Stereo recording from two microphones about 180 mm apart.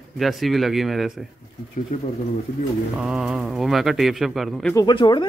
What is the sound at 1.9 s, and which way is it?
Speech, 45° left (ahead or behind).